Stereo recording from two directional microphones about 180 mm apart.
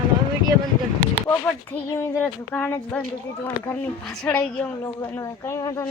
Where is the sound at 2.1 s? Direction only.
10° left (ahead or behind).